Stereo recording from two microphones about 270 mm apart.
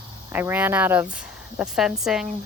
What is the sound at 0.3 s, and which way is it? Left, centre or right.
Speech, centre.